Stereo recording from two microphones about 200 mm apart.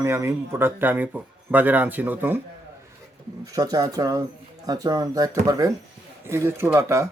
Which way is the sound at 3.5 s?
20° right (ahead or behind).